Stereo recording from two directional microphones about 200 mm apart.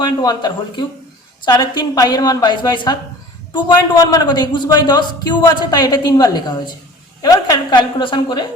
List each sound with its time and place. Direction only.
0.0 s a man's voice: 20° left (ahead or behind)